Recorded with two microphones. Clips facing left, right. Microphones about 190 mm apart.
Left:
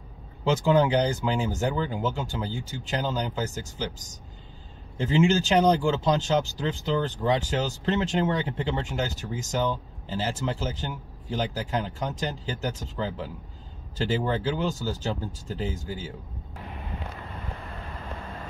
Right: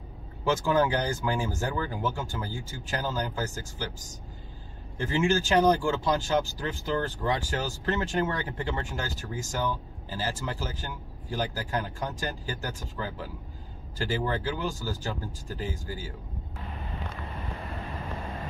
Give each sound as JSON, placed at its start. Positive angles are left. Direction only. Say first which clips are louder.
{"t": 0.5, "sound": "speech", "louder": "left 3 dB", "side_deg": 20}
{"t": 4.9, "sound": "speech", "louder": "left 4 dB", "side_deg": 20}